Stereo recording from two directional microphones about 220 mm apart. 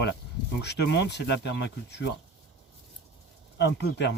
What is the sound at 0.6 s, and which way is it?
Rub, 50° left (ahead or behind).